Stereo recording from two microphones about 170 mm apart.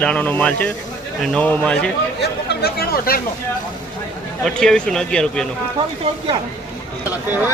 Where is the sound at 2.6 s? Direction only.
65° left (ahead or behind).